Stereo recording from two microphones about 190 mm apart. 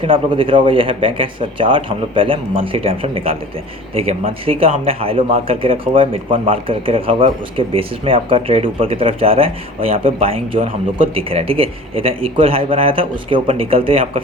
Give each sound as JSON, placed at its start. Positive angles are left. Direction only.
{"t": 0.0, "sound": "speech", "side_deg": -30}